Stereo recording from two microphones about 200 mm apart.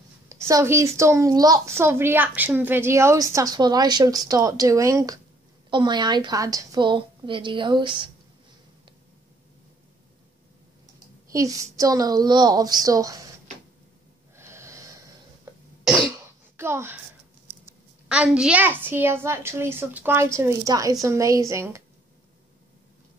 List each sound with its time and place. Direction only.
0.3 s a woman's voice: 15° right (ahead or behind)
11.3 s a woman's voice: 15° right (ahead or behind)
14.3 s snort: 15° right (ahead or behind)
16.5 s a woman's voice: 10° right (ahead or behind)
18.0 s a woman's voice: 5° right (ahead or behind)